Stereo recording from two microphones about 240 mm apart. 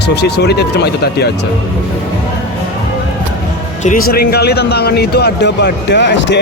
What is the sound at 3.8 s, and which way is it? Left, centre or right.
Speech, left.